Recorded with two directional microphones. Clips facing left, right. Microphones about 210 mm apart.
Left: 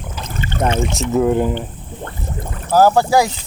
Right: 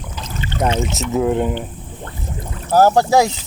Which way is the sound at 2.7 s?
25° right (ahead or behind).